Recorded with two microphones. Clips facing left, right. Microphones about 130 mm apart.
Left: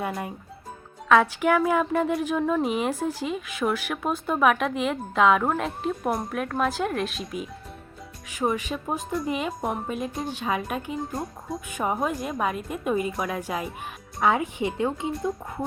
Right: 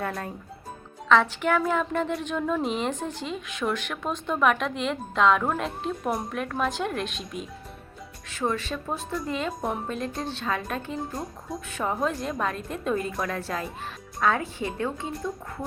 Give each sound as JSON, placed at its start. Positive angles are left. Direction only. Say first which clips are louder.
{"t": 1.0, "sound": "a woman's voice", "louder": "left 2 dB", "side_deg": 5}
{"t": 8.3, "sound": "a woman's voice", "louder": "left 2 dB", "side_deg": 15}
{"t": 9.5, "sound": "a woman's voice", "louder": "left 1 dB", "side_deg": 0}
{"t": 11.1, "sound": "a woman's voice", "louder": "left 2 dB", "side_deg": 0}
{"t": 11.7, "sound": "a woman's voice", "louder": "left 2 dB", "side_deg": 15}
{"t": 11.9, "sound": "a woman's voice", "louder": "left 1 dB", "side_deg": 0}